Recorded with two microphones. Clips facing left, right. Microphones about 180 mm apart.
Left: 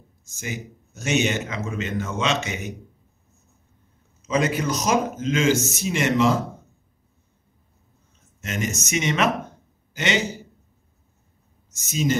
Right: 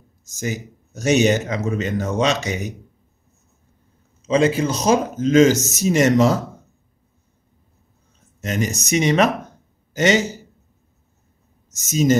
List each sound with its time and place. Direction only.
0.2 s speech: 40° right (ahead or behind)
4.2 s speech: 30° right (ahead or behind)
8.4 s a man's voice: 35° right (ahead or behind)
11.7 s speech: 40° right (ahead or behind)